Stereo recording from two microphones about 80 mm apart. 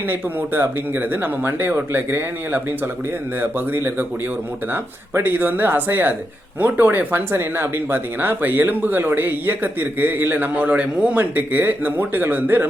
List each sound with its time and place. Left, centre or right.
0.1 s speech: right
4.7 s speech: right